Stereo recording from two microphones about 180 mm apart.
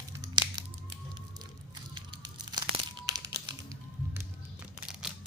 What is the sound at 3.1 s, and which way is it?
Music, 20° right (ahead or behind).